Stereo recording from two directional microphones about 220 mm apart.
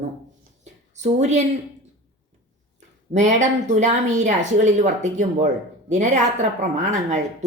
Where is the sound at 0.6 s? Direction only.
30° right (ahead or behind).